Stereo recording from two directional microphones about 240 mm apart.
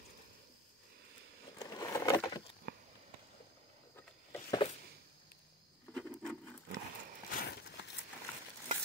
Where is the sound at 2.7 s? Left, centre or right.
Right.